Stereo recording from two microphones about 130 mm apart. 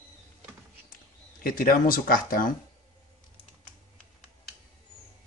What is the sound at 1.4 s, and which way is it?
Speech, 90° left.